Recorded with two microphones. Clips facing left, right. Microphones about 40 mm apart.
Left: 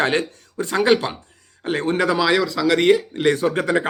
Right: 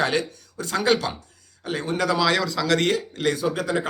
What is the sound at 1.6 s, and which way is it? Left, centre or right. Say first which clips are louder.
A man's voice: left 5 dB; left.